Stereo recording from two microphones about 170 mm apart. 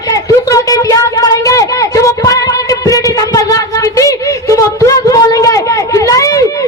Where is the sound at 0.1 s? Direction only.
20° left (ahead or behind).